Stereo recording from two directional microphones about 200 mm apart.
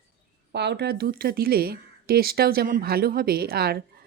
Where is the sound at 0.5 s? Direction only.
55° right (ahead or behind).